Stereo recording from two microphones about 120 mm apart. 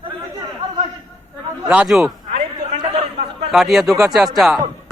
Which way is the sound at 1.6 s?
10° right (ahead or behind).